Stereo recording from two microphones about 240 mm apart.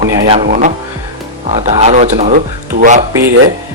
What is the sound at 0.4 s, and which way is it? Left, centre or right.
Speech, right.